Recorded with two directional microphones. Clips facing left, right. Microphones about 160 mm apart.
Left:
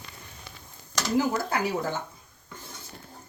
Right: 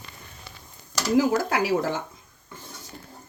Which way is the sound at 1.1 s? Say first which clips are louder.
Right 5 dB; 90° right.